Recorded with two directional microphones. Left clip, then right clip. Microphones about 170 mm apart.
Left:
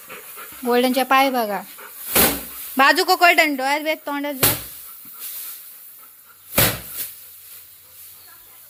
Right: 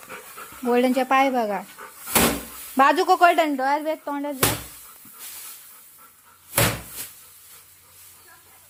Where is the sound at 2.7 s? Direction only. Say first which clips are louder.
Left 2 dB; 10° right (ahead or behind).